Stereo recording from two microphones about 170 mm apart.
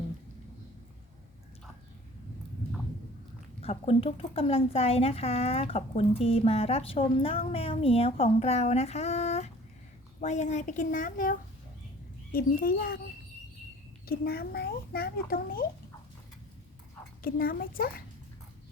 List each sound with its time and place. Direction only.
3.6 s a woman's voice: 35° left (ahead or behind); by 13.0 s 60° left (ahead or behind)
14.1 s a child's voice: 65° left (ahead or behind)
17.2 s a child's voice: 60° left (ahead or behind)